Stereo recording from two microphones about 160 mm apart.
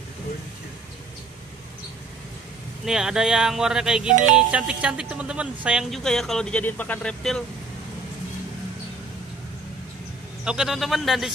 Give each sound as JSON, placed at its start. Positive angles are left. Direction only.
{"t": 2.8, "sound": "speech", "side_deg": -5}
{"t": 4.1, "sound": "speech", "side_deg": -50}
{"t": 4.4, "sound": "speech", "side_deg": -5}
{"t": 10.4, "sound": "speech", "side_deg": -5}